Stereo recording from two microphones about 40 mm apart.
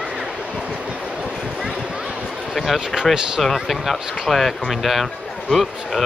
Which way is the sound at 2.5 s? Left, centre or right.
Centre.